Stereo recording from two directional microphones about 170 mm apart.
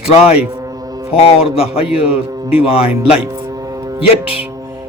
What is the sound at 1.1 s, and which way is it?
Speech, 35° left (ahead or behind).